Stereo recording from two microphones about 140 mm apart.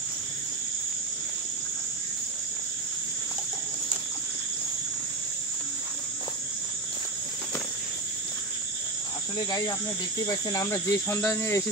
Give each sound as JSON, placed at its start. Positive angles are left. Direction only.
{"t": 9.5, "sound": "speech", "side_deg": 30}